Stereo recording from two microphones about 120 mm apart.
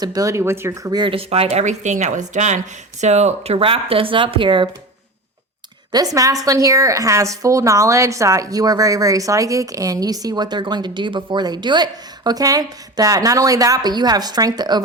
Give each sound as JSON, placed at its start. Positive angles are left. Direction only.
{"t": 0.0, "sound": "a woman's voice", "side_deg": -30}
{"t": 1.1, "sound": "speech", "side_deg": -55}
{"t": 5.9, "sound": "a woman's voice", "side_deg": -30}